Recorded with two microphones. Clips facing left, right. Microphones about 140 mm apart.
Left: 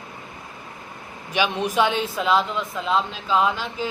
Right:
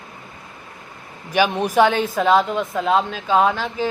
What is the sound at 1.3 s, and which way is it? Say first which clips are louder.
Speech: right 5 dB; 45° right (ahead or behind).